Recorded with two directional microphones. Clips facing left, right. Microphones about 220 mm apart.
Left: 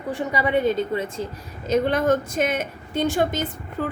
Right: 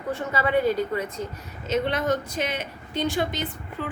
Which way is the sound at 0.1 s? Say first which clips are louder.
Left 2 dB; 15° left (ahead or behind).